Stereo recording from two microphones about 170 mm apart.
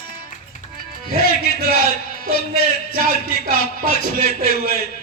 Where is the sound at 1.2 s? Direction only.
65° left (ahead or behind).